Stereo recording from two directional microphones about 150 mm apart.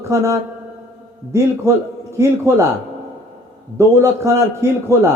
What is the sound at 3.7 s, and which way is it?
A man's voice, 20° right (ahead or behind).